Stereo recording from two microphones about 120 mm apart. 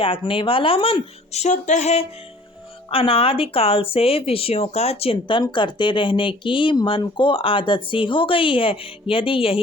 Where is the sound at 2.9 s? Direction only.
50° left (ahead or behind).